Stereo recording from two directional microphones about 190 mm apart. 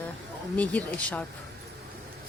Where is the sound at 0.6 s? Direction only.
5° left (ahead or behind).